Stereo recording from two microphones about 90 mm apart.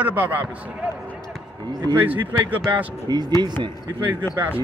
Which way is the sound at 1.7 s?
50° right (ahead or behind).